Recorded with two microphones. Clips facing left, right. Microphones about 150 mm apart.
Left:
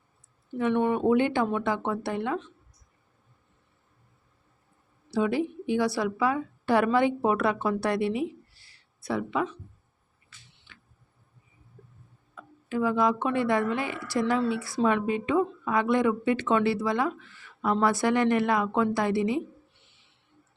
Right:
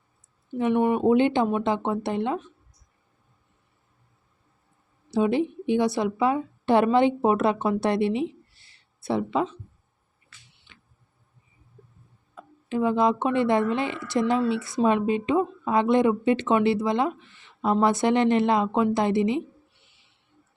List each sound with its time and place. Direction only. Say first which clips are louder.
0.5 s speech: right 3 dB; 20° right (ahead or behind)
5.1 s a woman's voice: right 3 dB; 25° right (ahead or behind)
10.7 s a sound: even; 20° right (ahead or behind)
12.3 s speech: right 2 dB; 25° right (ahead or behind)